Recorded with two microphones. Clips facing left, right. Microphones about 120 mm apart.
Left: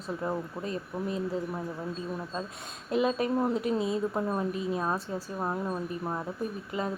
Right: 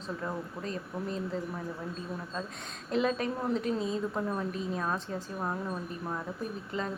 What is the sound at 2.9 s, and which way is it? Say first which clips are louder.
Speech: left 3 dB; 10° left (ahead or behind).